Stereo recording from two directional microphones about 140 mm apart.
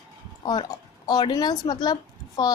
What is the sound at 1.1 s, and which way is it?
A woman's voice, 30° left (ahead or behind).